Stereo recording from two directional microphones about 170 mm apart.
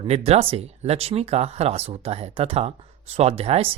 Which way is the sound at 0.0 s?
40° right (ahead or behind).